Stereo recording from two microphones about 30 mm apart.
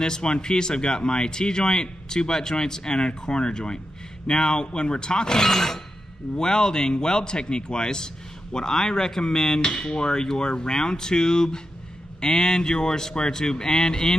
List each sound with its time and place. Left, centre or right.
0.0 s speech: left
5.4 s speech: centre